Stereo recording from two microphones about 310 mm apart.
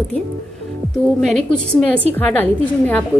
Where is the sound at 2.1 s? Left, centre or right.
Centre.